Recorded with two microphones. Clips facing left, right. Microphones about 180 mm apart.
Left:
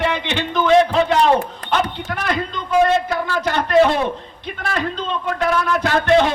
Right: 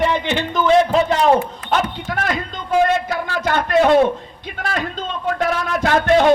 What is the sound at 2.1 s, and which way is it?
A man's voice, 45° right (ahead or behind).